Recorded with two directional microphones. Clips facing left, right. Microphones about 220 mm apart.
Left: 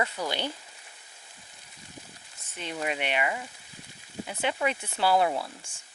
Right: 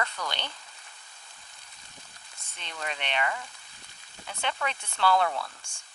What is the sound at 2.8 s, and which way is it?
Speech, 10° left (ahead or behind).